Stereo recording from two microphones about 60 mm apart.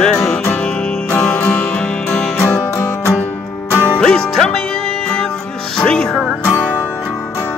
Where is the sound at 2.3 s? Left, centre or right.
Left.